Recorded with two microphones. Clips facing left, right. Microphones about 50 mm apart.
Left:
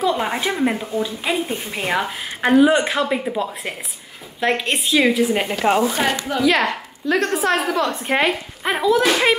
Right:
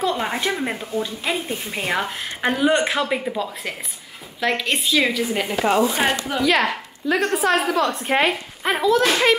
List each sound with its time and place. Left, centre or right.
0.1 s a woman's voice: centre
4.4 s a woman's voice: centre
6.0 s a woman's voice: centre